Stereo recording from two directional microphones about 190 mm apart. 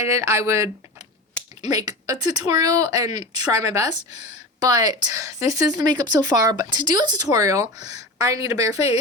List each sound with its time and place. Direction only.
0.1 s speech: 15° right (ahead or behind)